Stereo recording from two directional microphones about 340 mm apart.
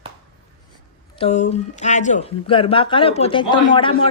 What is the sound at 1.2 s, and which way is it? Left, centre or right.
Speech, centre.